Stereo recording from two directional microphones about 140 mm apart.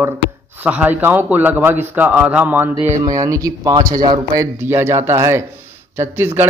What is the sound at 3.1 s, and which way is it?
Speech, 25° right (ahead or behind).